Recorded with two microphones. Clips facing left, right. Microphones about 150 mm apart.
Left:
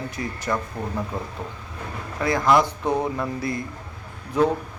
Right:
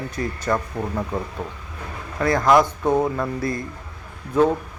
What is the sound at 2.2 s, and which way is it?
Speech, 20° left (ahead or behind).